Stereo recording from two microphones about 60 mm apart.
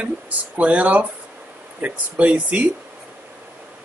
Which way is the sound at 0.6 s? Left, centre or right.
Right.